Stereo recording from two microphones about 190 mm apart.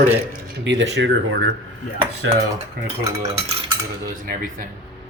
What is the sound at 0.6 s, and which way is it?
Speech, 75° right (ahead or behind).